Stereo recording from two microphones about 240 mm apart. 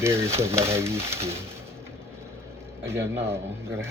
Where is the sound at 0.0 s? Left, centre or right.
Centre.